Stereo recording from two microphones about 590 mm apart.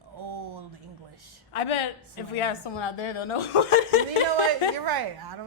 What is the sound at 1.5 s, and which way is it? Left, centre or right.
A woman's voice, left.